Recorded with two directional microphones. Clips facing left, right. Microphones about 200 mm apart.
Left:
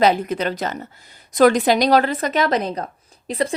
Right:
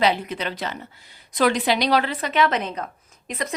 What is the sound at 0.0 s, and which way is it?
A woman's voice, 45° left (ahead or behind).